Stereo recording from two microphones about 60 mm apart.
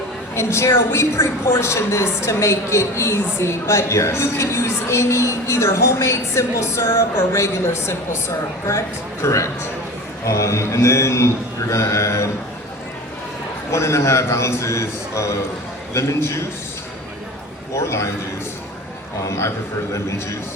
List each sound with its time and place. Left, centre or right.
0.3 s a woman's voice: left
9.2 s a man's voice: left
13.7 s a man's voice: left
17.7 s a man's voice: left
19.2 s a man's voice: left